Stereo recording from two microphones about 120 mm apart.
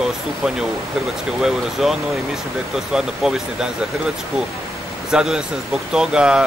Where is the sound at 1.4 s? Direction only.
5° right (ahead or behind).